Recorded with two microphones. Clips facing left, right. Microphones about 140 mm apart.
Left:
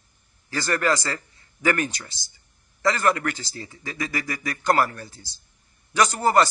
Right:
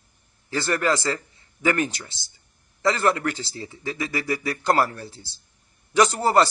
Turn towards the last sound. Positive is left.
turn(degrees=-30)  # may be behind; listen again after turning